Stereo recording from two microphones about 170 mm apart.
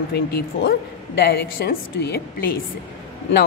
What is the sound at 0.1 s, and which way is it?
Speech, 70° left (ahead or behind).